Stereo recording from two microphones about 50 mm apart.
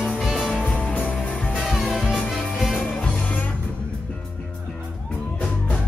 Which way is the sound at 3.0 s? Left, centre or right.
Left.